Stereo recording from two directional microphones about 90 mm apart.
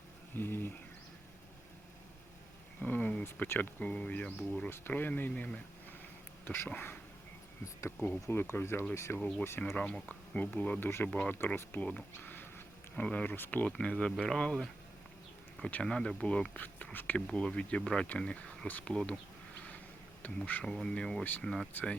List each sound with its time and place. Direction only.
0.3 s speech: 25° left (ahead or behind)
2.8 s a sound: 20° left (ahead or behind)
3.3 s speech: 20° left (ahead or behind)
7.6 s speech: 35° left (ahead or behind)
9.7 s speech: 15° left (ahead or behind)
11.1 s speech: 10° left (ahead or behind)
11.3 s speech: 25° left (ahead or behind)
15.7 s speech: 10° left (ahead or behind)
20.2 s speech: 20° left (ahead or behind)
21.7 s speech: 20° left (ahead or behind)